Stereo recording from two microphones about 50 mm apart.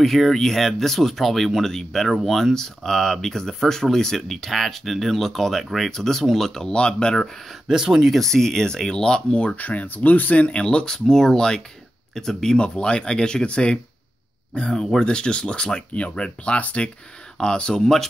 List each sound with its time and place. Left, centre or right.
0.0 s speech: centre
6.7 s speech: centre
7.6 s speech: centre
8.2 s speech: centre
9.4 s speech: left; by 18.0 s centre